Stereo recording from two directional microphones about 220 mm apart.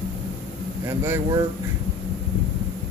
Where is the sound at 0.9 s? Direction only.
15° right (ahead or behind).